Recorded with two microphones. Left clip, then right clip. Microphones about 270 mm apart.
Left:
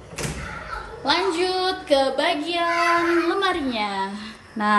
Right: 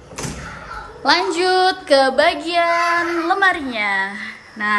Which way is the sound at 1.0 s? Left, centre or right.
Centre.